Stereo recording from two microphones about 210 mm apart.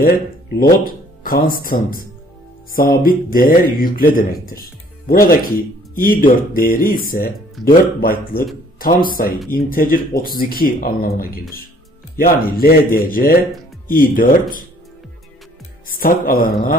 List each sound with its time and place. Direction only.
0.6 s speech: 45° left (ahead or behind)
16.0 s speech: 45° left (ahead or behind)